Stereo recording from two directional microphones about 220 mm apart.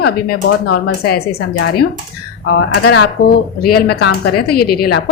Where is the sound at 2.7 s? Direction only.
50° left (ahead or behind).